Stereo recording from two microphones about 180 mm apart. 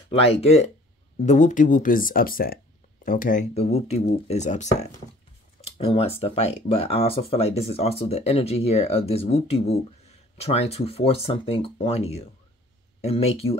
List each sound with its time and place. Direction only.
0.1 s speech: 35° left (ahead or behind)